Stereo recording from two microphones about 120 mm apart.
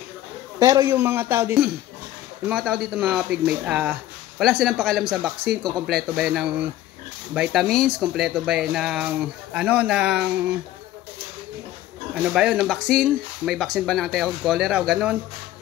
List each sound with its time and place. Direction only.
0.6 s a man's voice: 30° right (ahead or behind)
2.5 s speech: centre (ahead or behind)
4.4 s speech: centre (ahead or behind)
12.1 s speech: 10° right (ahead or behind)